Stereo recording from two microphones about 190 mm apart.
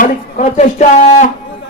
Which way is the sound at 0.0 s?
40° left (ahead or behind).